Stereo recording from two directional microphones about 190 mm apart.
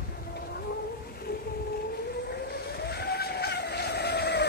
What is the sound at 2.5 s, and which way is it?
Vehicle, 55° left (ahead or behind).